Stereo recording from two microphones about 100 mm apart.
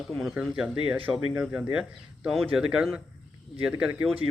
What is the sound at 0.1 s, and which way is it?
Speech, centre (ahead or behind).